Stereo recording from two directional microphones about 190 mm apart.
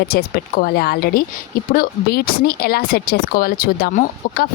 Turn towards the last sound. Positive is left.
turn(degrees=50)  # may be behind; listen again after turning